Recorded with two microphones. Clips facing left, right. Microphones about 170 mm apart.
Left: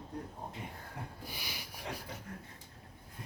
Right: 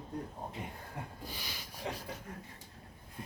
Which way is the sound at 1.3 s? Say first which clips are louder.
Even; 15° left (ahead or behind).